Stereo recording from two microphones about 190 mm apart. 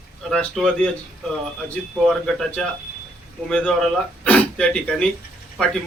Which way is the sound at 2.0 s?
Centre (ahead or behind).